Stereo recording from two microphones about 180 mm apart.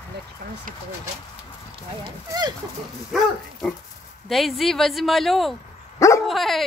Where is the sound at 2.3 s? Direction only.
25° right (ahead or behind).